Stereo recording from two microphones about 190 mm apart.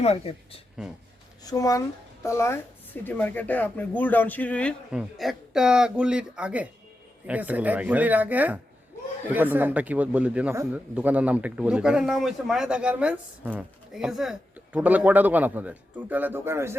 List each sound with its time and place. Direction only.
0.0 s speech: 30° left (ahead or behind)
1.5 s speech: 20° left (ahead or behind); by 16.7 s 15° right (ahead or behind)